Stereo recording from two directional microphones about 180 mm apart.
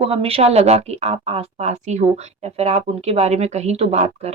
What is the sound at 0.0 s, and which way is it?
Speech, 30° right (ahead or behind).